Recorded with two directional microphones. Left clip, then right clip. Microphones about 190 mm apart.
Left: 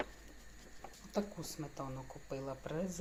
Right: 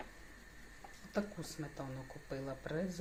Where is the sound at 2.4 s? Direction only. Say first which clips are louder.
Right 1 dB; 10° right (ahead or behind).